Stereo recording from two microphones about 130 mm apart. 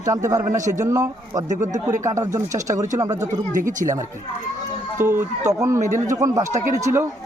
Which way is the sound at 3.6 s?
80° right.